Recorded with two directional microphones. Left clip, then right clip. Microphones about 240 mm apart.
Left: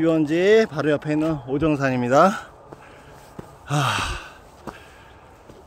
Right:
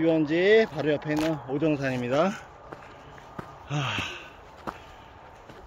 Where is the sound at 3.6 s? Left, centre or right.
Left.